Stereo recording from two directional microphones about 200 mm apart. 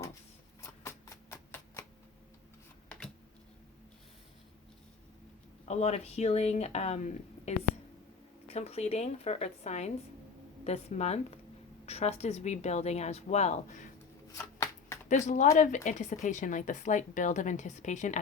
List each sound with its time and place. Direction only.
0.6 s a sound: 15° left (ahead or behind)
5.6 s speech: 35° left (ahead or behind)
14.3 s shuffling cards: 15° left (ahead or behind)
15.1 s speech: 35° left (ahead or behind)